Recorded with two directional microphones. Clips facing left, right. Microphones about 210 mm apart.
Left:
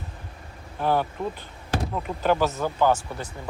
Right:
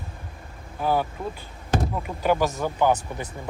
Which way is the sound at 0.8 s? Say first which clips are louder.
Even; 10° right (ahead or behind).